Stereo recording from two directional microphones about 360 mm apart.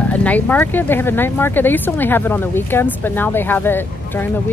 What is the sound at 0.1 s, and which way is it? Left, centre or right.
Speech, centre.